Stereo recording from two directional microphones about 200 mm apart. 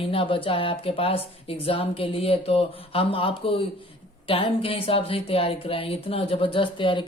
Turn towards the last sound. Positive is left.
turn(degrees=25)  # may be behind; listen again after turning